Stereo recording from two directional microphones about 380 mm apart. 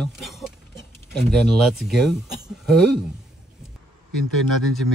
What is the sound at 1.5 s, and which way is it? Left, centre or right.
Speech, centre.